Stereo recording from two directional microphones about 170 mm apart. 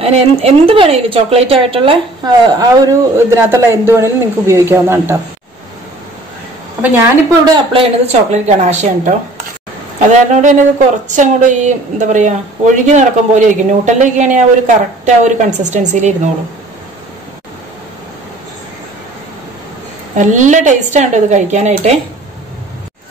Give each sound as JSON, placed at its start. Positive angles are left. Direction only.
{"t": 0.0, "sound": "speech", "side_deg": -35}
{"t": 2.5, "sound": "a man's voice", "side_deg": -20}
{"t": 6.8, "sound": "a woman's voice", "side_deg": -20}
{"t": 20.2, "sound": "a woman's voice", "side_deg": -45}